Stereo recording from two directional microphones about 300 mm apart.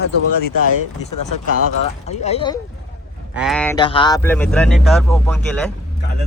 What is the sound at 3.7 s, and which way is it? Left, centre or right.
Speech, centre.